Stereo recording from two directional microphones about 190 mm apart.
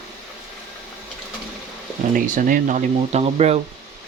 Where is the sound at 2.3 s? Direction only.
45° right (ahead or behind).